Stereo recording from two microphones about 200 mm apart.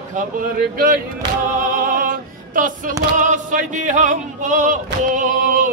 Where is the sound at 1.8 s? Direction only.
45° right (ahead or behind).